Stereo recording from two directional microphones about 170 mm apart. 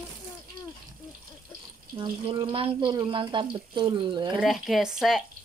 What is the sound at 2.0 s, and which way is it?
Speech, 30° right (ahead or behind).